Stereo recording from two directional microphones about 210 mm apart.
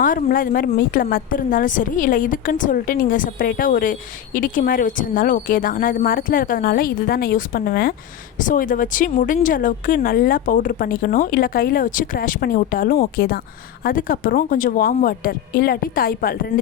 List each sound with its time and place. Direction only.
0.0 s a woman's voice: 40° left (ahead or behind)